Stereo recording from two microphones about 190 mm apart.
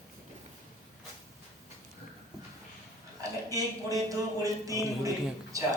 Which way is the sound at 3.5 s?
20° right (ahead or behind).